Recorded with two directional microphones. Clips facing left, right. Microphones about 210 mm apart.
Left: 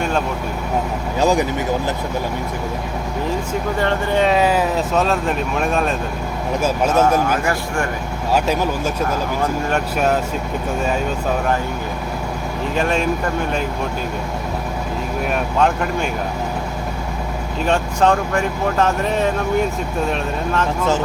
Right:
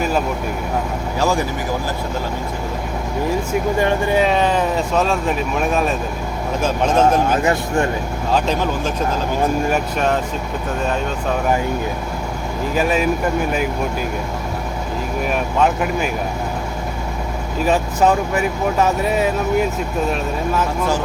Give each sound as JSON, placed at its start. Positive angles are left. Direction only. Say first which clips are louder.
{"t": 1.2, "sound": "speech", "louder": "left 3 dB", "side_deg": 20}
{"t": 3.8, "sound": "speech", "louder": "even", "side_deg": -15}
{"t": 6.6, "sound": "speech", "louder": "even", "side_deg": 10}
{"t": 6.9, "sound": "speech", "louder": "right 3 dB", "side_deg": -25}
{"t": 8.3, "sound": "speech", "louder": "left 1 dB", "side_deg": 10}
{"t": 9.4, "sound": "speech", "louder": "right 4 dB", "side_deg": -10}
{"t": 12.7, "sound": "speech", "louder": "right 1 dB", "side_deg": -5}
{"t": 15.3, "sound": "speech", "louder": "even", "side_deg": 0}
{"t": 17.7, "sound": "speech", "louder": "even", "side_deg": -5}